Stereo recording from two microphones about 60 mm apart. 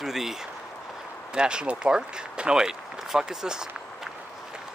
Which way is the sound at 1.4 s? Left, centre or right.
Centre.